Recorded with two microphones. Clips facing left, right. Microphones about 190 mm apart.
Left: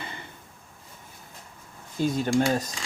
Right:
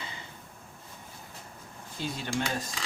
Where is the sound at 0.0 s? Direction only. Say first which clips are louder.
Left 4 dB; 55° left (ahead or behind).